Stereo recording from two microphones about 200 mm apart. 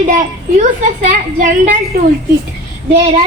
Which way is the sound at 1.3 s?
40° right (ahead or behind).